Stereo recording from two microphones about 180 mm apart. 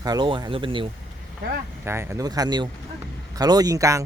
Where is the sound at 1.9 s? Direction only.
15° right (ahead or behind).